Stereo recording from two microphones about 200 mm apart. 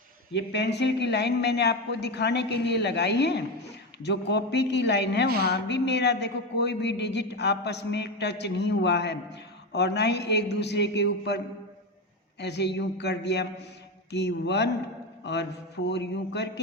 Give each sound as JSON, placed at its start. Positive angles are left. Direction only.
{"t": 0.3, "sound": "speech", "side_deg": 60}
{"t": 12.4, "sound": "speech", "side_deg": 60}
{"t": 15.2, "sound": "mantra", "side_deg": 60}
{"t": 15.9, "sound": "speech", "side_deg": 60}